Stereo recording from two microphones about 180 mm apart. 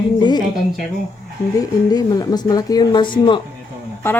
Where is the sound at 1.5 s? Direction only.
20° left (ahead or behind).